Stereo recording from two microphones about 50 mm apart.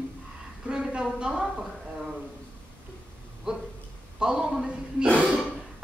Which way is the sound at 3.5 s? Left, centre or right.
Centre.